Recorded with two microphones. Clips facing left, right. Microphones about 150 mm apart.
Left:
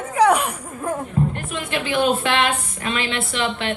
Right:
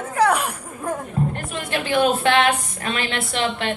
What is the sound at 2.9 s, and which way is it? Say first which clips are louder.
Speech: left 1 dB; 40° right (ahead or behind).